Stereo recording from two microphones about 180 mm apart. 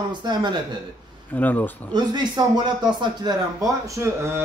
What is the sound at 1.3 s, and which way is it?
Speech, 10° left (ahead or behind).